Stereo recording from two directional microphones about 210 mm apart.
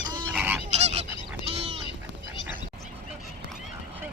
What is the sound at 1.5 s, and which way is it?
Duck, 30° right (ahead or behind).